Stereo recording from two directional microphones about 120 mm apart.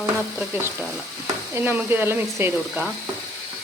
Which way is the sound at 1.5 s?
15° right (ahead or behind).